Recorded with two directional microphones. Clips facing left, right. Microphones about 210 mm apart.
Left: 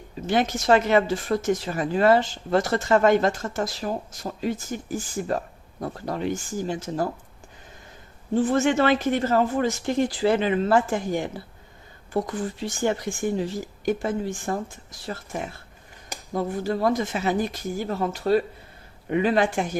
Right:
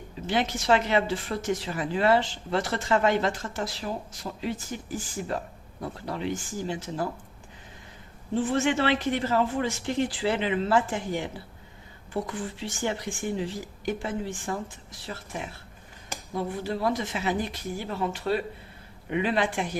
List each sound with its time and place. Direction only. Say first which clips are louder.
0.3 s speech: left 4 dB; 45° left (ahead or behind)
8.4 s speech: left 4 dB; 45° left (ahead or behind)